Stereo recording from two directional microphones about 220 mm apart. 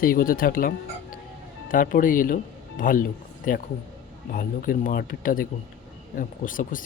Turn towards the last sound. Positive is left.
turn(degrees=40)  # may be behind; listen again after turning